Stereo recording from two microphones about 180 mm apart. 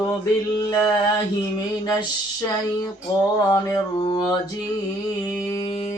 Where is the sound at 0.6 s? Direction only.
20° left (ahead or behind).